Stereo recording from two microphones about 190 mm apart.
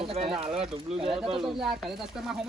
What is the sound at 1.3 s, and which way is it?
Speech, centre (ahead or behind).